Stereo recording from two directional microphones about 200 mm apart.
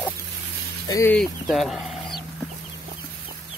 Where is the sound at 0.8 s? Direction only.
15° left (ahead or behind).